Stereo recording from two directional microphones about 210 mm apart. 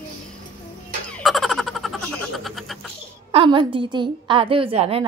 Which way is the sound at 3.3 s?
25° right (ahead or behind).